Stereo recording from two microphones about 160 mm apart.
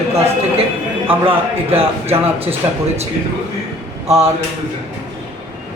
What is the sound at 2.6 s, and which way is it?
Speech, 25° right (ahead or behind).